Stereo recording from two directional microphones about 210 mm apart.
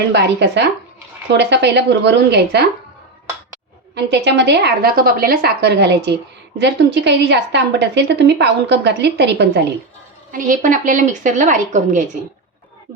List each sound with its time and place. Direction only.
0.1 s a woman's voice: 55° right (ahead or behind)
3.9 s a woman's voice: 55° right (ahead or behind)
10.3 s a woman's voice: 40° right (ahead or behind)